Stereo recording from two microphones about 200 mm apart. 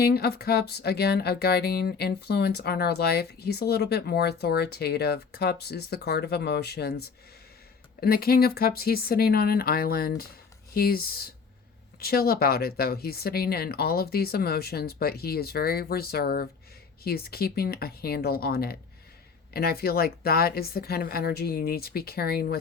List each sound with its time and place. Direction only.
0.0 s speech: 50° left (ahead or behind)
8.0 s speech: 50° left (ahead or behind)